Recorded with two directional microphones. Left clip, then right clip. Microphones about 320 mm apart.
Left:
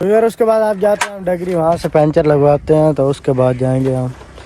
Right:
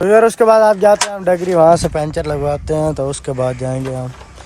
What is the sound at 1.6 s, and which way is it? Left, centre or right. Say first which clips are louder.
Speech: right 5 dB; centre.